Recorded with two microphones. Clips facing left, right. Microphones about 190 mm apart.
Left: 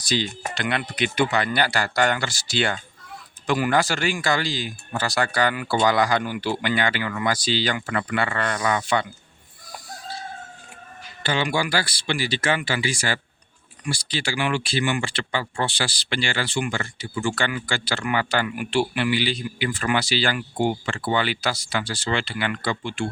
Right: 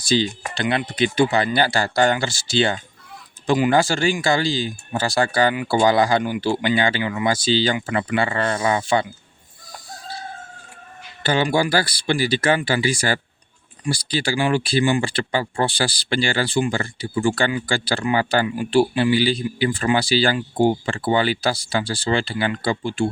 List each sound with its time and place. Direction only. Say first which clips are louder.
0.0 s speech: right 5 dB; 30° right (ahead or behind)
11.2 s speech: right 5 dB; 40° right (ahead or behind)